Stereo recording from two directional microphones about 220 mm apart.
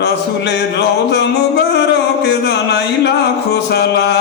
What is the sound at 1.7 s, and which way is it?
Music, 50° left (ahead or behind).